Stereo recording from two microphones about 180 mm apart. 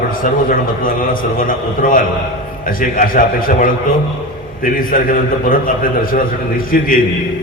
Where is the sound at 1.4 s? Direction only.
50° left (ahead or behind).